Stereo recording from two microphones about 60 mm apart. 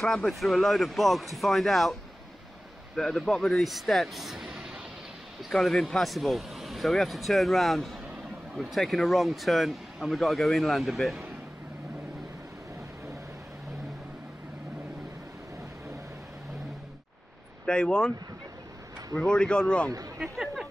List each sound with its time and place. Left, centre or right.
0.0 s speech: centre
3.0 s speech: centre
5.4 s speech: centre
17.6 s speech: centre
19.1 s speech: centre
20.2 s a sound: centre